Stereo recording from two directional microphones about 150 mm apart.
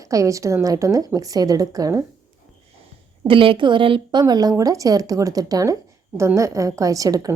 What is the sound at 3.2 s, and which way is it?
A woman's voice, 35° right (ahead or behind).